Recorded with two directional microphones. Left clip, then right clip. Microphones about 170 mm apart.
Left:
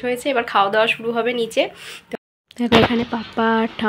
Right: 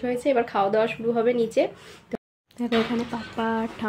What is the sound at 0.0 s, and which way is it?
Speech, 10° right (ahead or behind).